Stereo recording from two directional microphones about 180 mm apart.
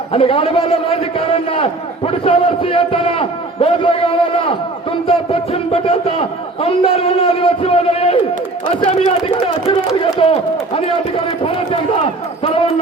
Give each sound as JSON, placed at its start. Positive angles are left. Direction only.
{"t": 0.1, "sound": "a man's voice", "side_deg": 30}
{"t": 10.8, "sound": "a man's voice", "side_deg": 30}
{"t": 12.4, "sound": "a sound", "side_deg": 30}